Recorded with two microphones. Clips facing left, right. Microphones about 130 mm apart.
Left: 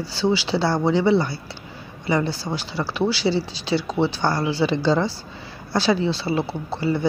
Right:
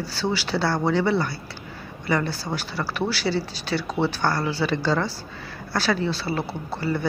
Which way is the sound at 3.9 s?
5° right (ahead or behind).